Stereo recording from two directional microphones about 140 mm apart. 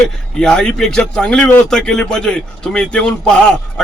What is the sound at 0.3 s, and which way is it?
Speech, 5° left (ahead or behind).